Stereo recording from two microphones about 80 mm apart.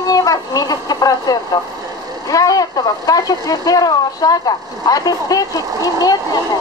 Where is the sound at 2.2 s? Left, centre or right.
Left.